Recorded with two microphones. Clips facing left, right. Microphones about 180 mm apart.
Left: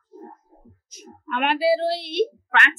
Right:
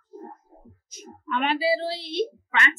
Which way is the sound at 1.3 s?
60° left (ahead or behind).